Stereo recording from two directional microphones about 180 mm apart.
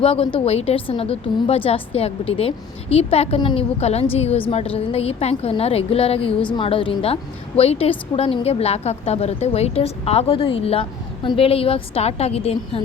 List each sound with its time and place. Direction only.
0.0 s a woman's voice: 30° left (ahead or behind)